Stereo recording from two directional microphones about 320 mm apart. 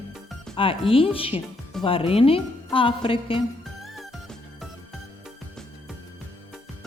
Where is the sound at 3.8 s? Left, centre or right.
Centre.